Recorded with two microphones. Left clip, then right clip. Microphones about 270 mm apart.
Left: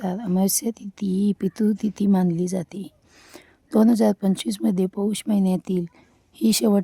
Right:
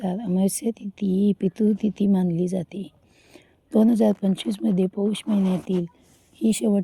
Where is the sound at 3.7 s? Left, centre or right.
Left.